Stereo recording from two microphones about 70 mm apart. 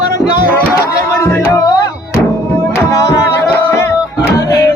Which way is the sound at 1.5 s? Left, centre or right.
Left.